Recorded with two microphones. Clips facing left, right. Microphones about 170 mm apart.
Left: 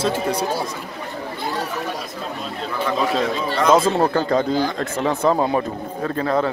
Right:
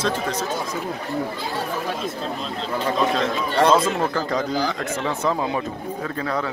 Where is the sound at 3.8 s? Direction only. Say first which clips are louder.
Left 5 dB; 30° left (ahead or behind).